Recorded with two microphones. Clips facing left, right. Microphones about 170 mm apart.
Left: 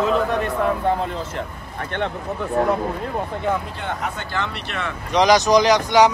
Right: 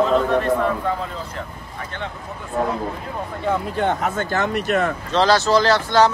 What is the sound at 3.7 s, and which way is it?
Speech, 45° right (ahead or behind).